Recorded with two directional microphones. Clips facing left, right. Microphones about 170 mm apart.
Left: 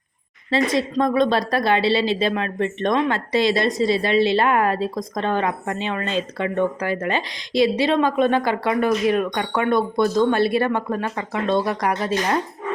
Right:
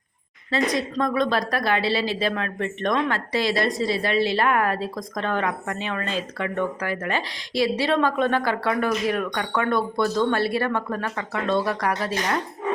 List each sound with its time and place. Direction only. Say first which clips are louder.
0.5 s speech: left 4 dB; 25° left (ahead or behind)